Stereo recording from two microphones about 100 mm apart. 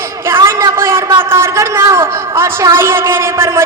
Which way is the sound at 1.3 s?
25° right (ahead or behind).